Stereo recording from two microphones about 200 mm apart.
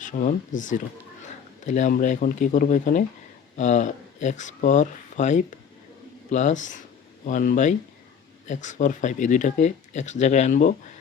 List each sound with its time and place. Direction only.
0.0 s speech: 40° left (ahead or behind)